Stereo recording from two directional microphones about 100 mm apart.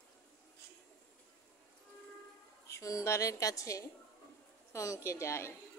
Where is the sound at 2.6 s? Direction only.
30° left (ahead or behind).